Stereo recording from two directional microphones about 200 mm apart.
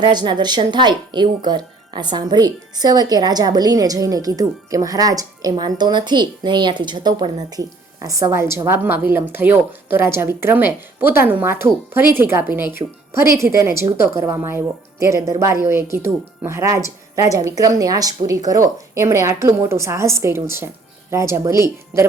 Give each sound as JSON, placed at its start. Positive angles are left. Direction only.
{"t": 0.0, "sound": "a woman's voice", "side_deg": -20}